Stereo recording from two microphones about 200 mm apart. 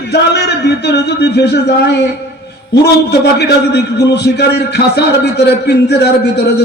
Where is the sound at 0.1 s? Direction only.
55° left (ahead or behind).